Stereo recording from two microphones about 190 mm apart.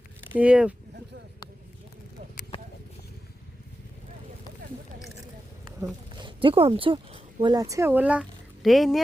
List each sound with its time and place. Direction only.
0.3 s speech: 5° right (ahead or behind)
2.5 s clip-clop: 30° left (ahead or behind)
5.8 s speech: 25° right (ahead or behind); by 9.0 s centre (ahead or behind)